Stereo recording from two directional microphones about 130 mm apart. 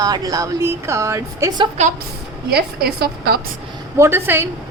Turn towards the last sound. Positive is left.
turn(degrees=-20)  # may be behind; listen again after turning